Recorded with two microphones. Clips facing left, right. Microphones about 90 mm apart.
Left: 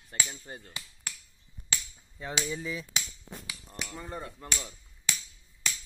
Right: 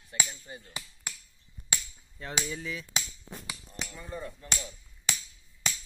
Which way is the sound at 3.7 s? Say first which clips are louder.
Left 2 dB; 60° left (ahead or behind).